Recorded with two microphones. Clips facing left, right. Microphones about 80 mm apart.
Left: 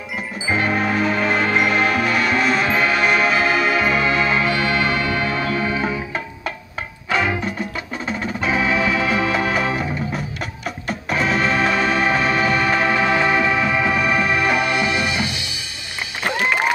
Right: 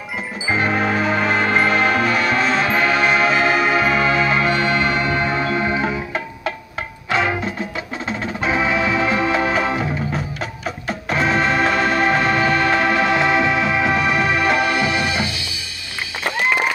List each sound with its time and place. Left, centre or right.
0.5 s music: centre
4.5 s music: right
5.9 s music: centre
14.7 s music: right